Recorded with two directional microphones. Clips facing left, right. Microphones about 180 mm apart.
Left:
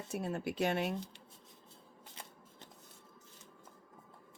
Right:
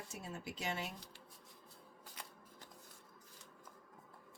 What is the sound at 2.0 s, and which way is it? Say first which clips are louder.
Shuffling cards: left 2 dB; 25° left (ahead or behind).